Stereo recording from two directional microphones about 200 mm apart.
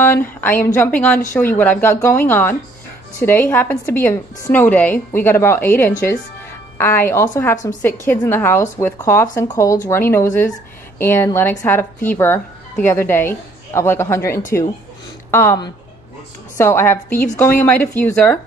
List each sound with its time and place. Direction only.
0.0 s speech: 10° left (ahead or behind)